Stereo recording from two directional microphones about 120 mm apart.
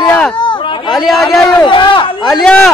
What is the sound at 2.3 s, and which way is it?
Speech, centre (ahead or behind).